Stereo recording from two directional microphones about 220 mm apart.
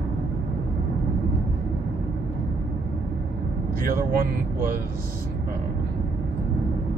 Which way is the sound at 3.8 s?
40° right (ahead or behind).